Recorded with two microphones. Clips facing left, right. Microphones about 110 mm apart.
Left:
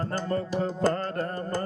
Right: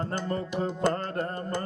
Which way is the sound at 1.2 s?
25° right (ahead or behind).